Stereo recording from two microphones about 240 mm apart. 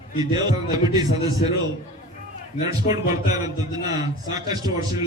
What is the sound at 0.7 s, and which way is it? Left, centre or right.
Speech, centre.